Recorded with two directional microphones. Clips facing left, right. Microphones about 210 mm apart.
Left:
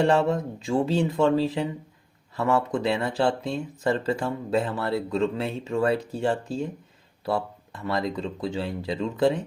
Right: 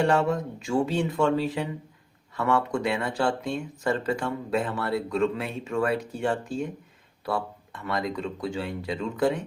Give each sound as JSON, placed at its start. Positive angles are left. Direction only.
{"t": 0.0, "sound": "speech", "side_deg": 25}
{"t": 7.9, "sound": "speech", "side_deg": 25}